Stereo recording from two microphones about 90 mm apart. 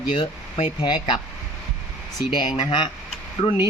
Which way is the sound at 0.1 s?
80° left.